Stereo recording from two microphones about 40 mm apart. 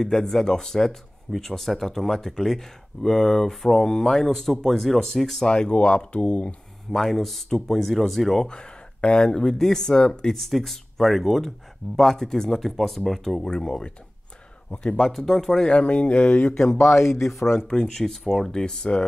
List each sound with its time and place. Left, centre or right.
0.0 s speech: centre
5.5 s speech: left
6.9 s speech: centre
8.5 s speech: left
10.3 s speech: centre
13.4 s a man's voice: centre
15.0 s speech: centre
15.7 s speech: left
17.6 s speech: left
17.9 s speech: centre